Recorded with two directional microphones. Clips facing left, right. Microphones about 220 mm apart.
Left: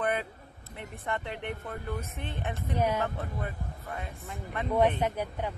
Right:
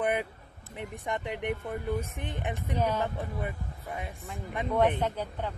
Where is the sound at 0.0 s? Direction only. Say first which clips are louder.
Right 2 dB; 15° right (ahead or behind).